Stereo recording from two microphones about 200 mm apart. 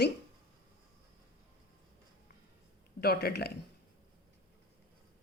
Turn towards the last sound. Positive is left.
turn(degrees=50)  # may be behind; listen again after turning